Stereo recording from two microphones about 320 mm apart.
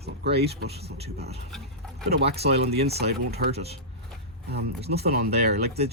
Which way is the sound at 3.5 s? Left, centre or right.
Centre.